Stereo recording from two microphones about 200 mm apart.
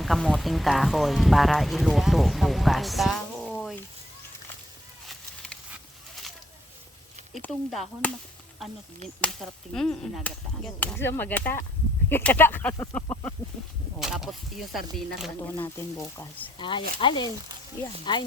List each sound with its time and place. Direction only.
0.0 s speech: centre (ahead or behind)
5.0 s a sound: 5° left (ahead or behind)
7.4 s speech: 5° left (ahead or behind)
9.2 s whip: 5° left (ahead or behind)
14.0 s speech: centre (ahead or behind)
16.6 s speech: 25° left (ahead or behind)